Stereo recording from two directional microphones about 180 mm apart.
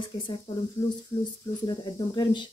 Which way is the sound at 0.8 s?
15° left (ahead or behind).